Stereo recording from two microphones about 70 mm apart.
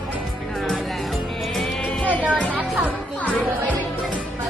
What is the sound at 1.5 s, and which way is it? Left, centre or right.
Music, centre.